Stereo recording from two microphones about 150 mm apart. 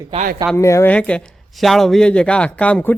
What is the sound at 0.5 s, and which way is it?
Speech, 20° left (ahead or behind).